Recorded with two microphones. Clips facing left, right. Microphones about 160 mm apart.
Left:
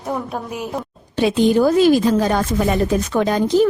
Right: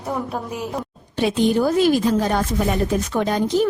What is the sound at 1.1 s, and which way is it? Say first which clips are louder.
Speech: left 3 dB; 90° left.